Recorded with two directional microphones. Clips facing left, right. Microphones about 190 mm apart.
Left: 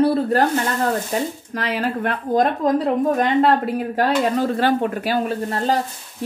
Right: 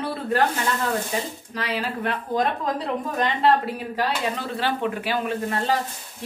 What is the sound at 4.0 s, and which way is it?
Speech, 50° left (ahead or behind).